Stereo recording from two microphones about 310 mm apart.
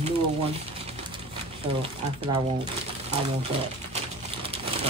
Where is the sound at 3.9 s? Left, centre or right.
Centre.